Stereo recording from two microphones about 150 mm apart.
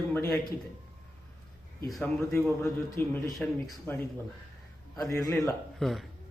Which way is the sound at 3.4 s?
Centre (ahead or behind).